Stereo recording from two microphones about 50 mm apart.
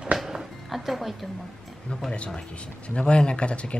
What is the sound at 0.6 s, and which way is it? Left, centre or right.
Speech, centre.